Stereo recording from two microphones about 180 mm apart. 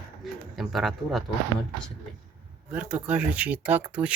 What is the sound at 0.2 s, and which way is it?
Speech, centre (ahead or behind).